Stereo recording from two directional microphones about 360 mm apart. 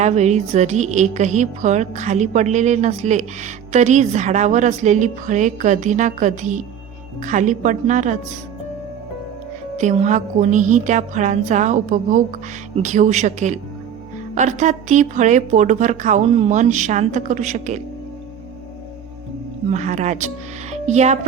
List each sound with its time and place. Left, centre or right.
0.0 s speech: centre
9.7 s speech: centre
19.7 s speech: centre